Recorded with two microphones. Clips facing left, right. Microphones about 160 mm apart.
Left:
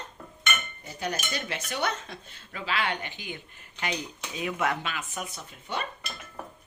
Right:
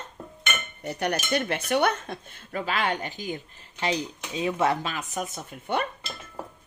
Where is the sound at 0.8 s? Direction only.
65° right (ahead or behind); by 5.8 s 50° right (ahead or behind).